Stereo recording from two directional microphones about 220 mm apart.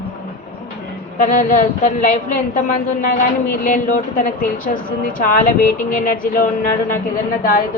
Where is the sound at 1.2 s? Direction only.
35° left (ahead or behind).